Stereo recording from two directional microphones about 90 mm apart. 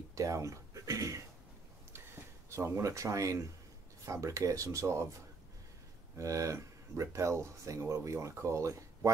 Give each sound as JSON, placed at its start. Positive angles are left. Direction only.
{"t": 0.1, "sound": "a sound", "side_deg": -35}
{"t": 4.0, "sound": "speech", "side_deg": -35}
{"t": 6.1, "sound": "speech", "side_deg": -35}